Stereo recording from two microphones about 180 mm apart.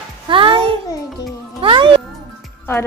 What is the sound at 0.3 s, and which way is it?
Music, 30° right (ahead or behind).